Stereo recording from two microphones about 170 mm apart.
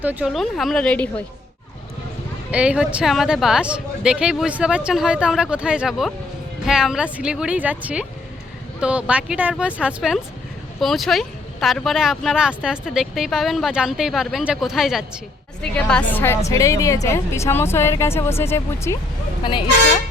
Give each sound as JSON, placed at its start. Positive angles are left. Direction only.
{"t": 0.0, "sound": "speech", "side_deg": -10}
{"t": 2.5, "sound": "speech", "side_deg": -5}
{"t": 19.4, "sound": "speech", "side_deg": 30}